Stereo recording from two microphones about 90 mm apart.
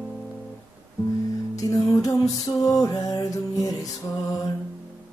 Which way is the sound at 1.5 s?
40° left (ahead or behind).